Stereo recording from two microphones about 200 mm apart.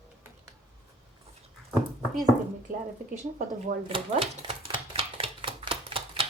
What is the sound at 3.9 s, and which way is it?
Typewriter, 30° right (ahead or behind).